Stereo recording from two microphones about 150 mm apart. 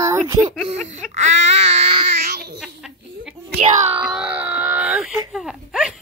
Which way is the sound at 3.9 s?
5° right (ahead or behind).